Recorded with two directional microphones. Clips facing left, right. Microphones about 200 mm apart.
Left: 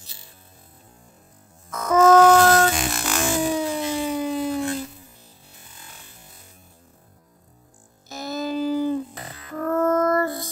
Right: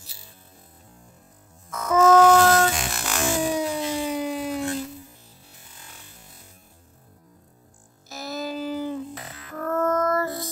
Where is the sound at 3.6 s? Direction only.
10° right (ahead or behind).